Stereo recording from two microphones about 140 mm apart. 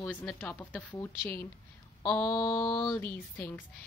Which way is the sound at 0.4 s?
10° left (ahead or behind).